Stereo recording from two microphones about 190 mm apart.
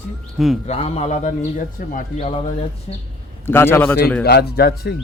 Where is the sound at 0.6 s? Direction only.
35° left (ahead or behind).